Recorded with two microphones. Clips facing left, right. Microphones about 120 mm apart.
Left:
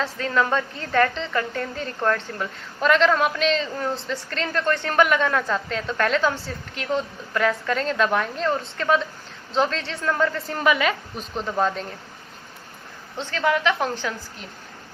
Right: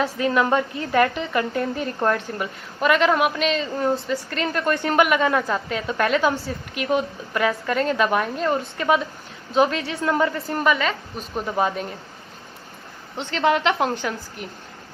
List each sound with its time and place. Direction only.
0.2 s a woman's voice: 15° right (ahead or behind)
4.4 s a woman's voice: 15° right (ahead or behind)
10.3 s a woman's voice: centre (ahead or behind)
11.3 s a woman's voice: 10° right (ahead or behind)
13.3 s a woman's voice: 20° right (ahead or behind)